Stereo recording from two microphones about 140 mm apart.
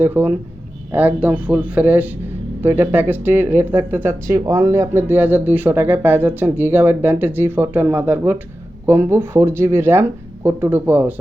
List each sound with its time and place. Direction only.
0.0 s speech: 15° right (ahead or behind)